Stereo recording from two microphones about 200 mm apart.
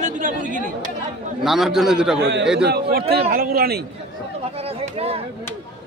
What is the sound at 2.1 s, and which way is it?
Speech, 60° right (ahead or behind).